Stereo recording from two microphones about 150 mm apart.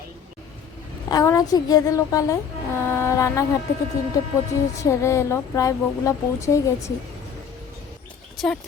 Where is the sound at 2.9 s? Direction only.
20° left (ahead or behind).